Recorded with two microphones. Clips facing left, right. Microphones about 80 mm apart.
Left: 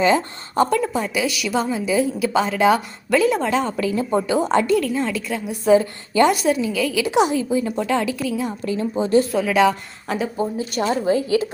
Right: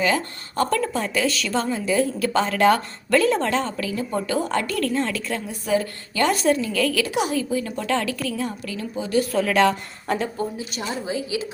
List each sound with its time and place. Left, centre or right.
0.0 s speech: left
3.8 s a woman's voice: left
4.8 s speech: centre
5.5 s a woman's voice: left
6.3 s speech: centre
8.6 s a woman's voice: left
9.3 s speech: centre
10.7 s a woman's voice: left